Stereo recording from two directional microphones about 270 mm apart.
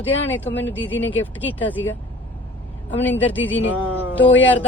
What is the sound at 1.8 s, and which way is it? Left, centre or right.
Speech, left.